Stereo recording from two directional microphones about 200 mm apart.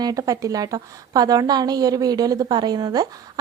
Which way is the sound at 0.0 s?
15° right (ahead or behind).